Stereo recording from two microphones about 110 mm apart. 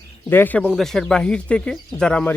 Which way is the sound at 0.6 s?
Centre (ahead or behind).